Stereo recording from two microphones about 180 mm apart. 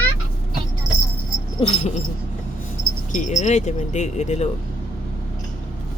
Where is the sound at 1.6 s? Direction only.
40° left (ahead or behind).